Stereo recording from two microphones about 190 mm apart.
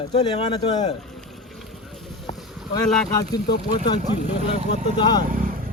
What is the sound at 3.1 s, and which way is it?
Speech, 20° left (ahead or behind).